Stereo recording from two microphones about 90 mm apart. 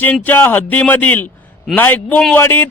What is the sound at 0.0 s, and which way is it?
A man's voice, 20° left (ahead or behind).